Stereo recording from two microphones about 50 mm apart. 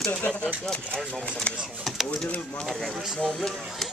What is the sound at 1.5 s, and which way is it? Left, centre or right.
Speech, left.